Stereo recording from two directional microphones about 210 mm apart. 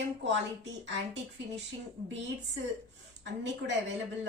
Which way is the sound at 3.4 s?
60° right (ahead or behind).